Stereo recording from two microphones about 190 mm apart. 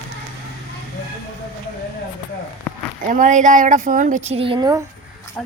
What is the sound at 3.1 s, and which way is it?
A woman's voice, 40° right (ahead or behind).